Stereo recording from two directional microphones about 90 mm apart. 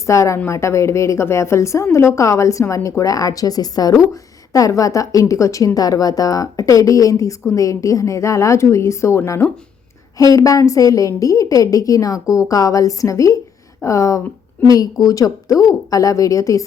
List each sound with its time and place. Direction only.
0.0 s a woman's voice: 35° left (ahead or behind)